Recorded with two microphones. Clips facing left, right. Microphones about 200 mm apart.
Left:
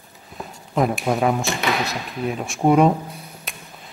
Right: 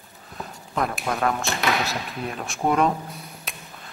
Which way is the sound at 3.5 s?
Centre (ahead or behind).